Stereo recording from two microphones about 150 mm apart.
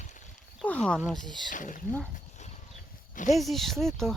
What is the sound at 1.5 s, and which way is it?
Speech, 60° left (ahead or behind).